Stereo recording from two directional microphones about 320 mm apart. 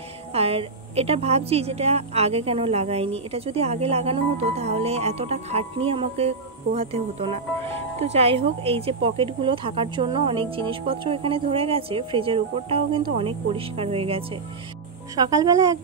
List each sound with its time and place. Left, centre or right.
0.3 s a woman's voice: centre